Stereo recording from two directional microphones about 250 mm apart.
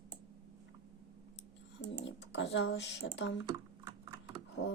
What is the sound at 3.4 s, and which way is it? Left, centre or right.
Typing, centre.